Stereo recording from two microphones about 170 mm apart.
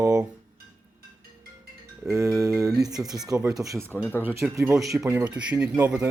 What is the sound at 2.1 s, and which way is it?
Speech, 20° right (ahead or behind).